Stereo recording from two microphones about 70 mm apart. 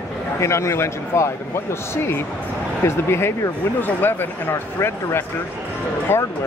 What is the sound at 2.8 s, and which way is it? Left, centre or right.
Speech, left.